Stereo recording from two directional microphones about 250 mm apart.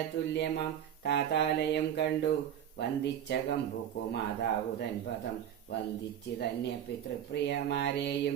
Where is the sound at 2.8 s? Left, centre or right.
Left.